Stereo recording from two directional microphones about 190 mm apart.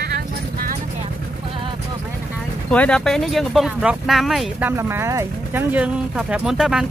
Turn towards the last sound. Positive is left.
turn(degrees=-5)  # may be behind; listen again after turning